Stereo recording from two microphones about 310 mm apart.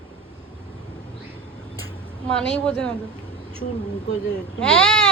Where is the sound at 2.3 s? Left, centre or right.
Centre.